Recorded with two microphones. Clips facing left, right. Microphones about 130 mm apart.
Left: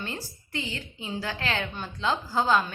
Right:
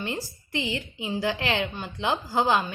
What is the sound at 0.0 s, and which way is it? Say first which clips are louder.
A woman's voice: right 4 dB; 15° right (ahead or behind).